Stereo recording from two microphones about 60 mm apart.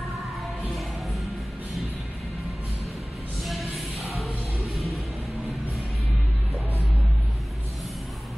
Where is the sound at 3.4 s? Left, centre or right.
Centre.